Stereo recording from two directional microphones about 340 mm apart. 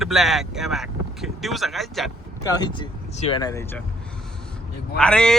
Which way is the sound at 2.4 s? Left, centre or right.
Centre.